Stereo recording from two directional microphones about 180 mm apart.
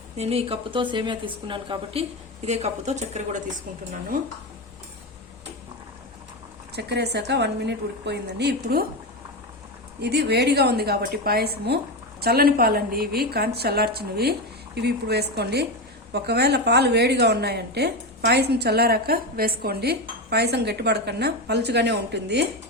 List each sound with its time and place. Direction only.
0.2 s a woman's voice: 35° right (ahead or behind)
6.7 s a woman's voice: 65° right (ahead or behind)
10.0 s a woman's voice: 65° right (ahead or behind)